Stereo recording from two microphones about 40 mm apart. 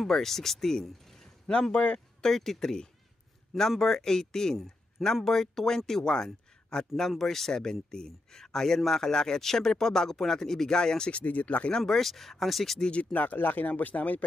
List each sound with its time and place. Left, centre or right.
0.0 s speech: centre
1.5 s speech: left
2.2 s speech: centre
11.2 s speech: left
11.8 s speech: centre
13.1 s speech: left